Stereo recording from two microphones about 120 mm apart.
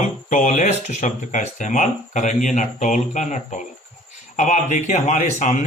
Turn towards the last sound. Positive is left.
turn(degrees=85)